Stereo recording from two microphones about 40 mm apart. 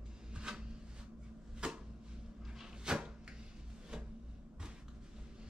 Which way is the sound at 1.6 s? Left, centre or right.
Right.